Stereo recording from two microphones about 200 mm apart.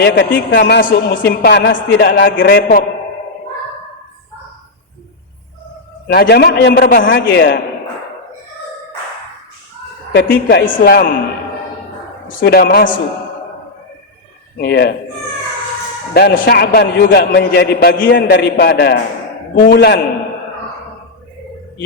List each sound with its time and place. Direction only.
0.0 s speech: 50° left (ahead or behind)
6.1 s a man's voice: 55° left (ahead or behind)
10.2 s speech: 55° left (ahead or behind)
12.4 s a man's voice: 50° left (ahead or behind)
14.6 s a man's voice: 55° left (ahead or behind)
16.1 s a man's voice: 50° left (ahead or behind)